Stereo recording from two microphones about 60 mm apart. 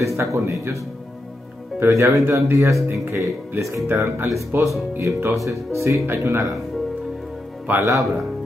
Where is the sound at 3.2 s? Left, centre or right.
Right.